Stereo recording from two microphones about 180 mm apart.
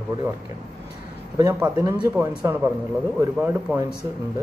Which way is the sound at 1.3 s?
20° right (ahead or behind).